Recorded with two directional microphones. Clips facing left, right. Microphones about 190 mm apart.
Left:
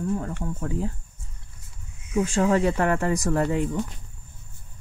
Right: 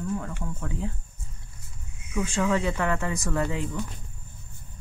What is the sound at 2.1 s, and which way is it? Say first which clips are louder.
A woman's voice: left 4 dB; 40° left (ahead or behind).